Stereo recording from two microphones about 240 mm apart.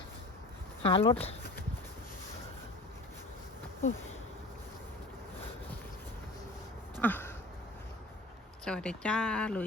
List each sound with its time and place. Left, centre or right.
0.8 s speech: left
7.0 s a sound: centre
8.6 s speech: centre